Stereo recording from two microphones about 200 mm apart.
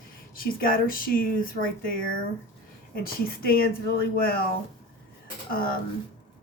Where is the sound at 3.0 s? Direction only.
45° left (ahead or behind).